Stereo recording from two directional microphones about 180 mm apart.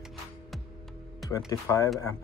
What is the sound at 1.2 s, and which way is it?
Speech, 20° left (ahead or behind).